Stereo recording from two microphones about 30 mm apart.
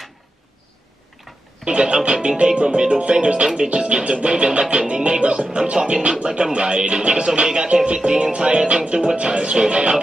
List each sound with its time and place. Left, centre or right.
1.6 s music: right